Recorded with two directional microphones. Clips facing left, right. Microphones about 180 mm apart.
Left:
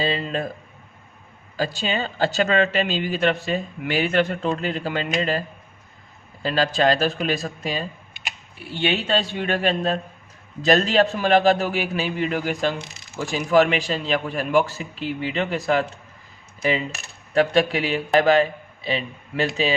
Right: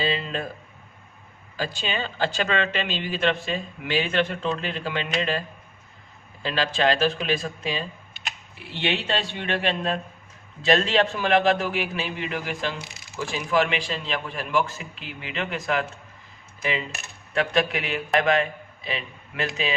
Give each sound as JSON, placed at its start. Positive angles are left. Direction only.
{"t": 0.0, "sound": "speech", "side_deg": 40}
{"t": 1.5, "sound": "speech", "side_deg": 40}
{"t": 6.4, "sound": "speech", "side_deg": 40}
{"t": 16.6, "sound": "coin", "side_deg": 35}
{"t": 17.3, "sound": "a man's voice", "side_deg": 35}